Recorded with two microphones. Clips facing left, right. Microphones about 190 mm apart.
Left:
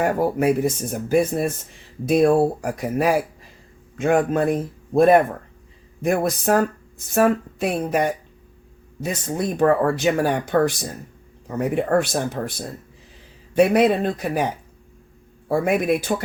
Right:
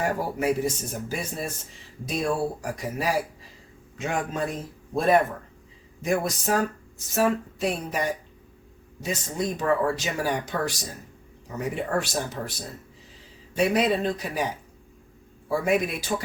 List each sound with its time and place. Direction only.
0.0 s a man's voice: 55° left (ahead or behind)
15.4 s speech: 55° left (ahead or behind)